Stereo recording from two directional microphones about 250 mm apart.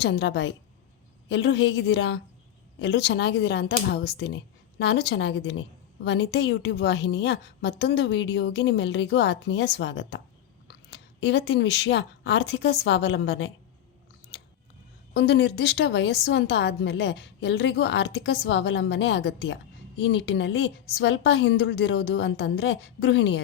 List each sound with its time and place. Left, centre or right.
0.0 s a woman's voice: left
11.2 s a woman's voice: left
15.1 s a woman's voice: left